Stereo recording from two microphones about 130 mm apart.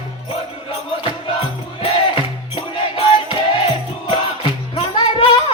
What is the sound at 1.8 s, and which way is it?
Music, 45° left (ahead or behind).